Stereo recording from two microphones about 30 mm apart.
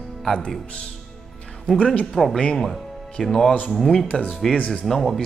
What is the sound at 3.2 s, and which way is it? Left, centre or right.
A man's voice, centre.